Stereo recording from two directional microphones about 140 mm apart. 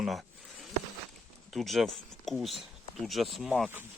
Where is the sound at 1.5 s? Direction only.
Centre (ahead or behind).